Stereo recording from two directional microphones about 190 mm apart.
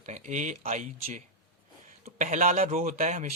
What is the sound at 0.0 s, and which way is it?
Speech, 40° right (ahead or behind).